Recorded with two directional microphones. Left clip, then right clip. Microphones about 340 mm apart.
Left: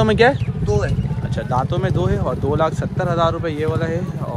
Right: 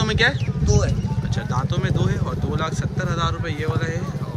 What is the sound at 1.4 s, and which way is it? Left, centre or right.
Speech, centre.